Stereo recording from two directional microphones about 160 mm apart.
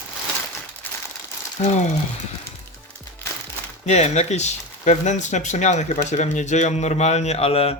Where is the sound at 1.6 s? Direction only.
45° left (ahead or behind).